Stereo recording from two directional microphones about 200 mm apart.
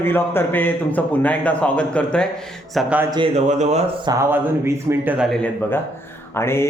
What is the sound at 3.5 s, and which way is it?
Speech, 35° right (ahead or behind).